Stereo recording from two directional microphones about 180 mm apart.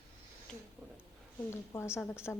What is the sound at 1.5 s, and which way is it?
Speech, 15° left (ahead or behind).